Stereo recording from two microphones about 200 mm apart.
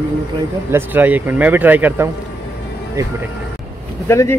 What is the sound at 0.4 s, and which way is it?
Speech, 10° right (ahead or behind).